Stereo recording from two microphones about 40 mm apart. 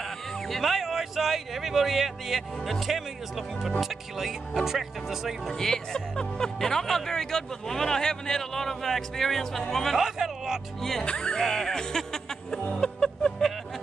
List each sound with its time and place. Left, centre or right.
0.5 s speech: centre
5.5 s speech: centre
9.9 s speech: centre
10.8 s speech: centre
11.1 s speech: left
11.3 s music: centre